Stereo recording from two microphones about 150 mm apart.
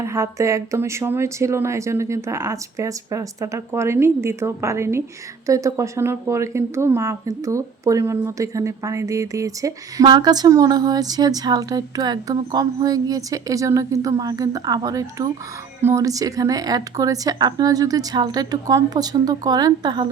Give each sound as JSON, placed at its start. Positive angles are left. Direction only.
{"t": 0.0, "sound": "speech", "side_deg": -20}